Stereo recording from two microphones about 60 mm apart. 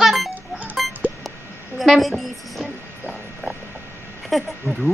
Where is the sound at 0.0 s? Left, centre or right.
Centre.